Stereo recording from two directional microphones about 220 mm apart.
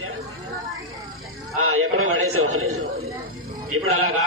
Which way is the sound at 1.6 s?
75° right (ahead or behind).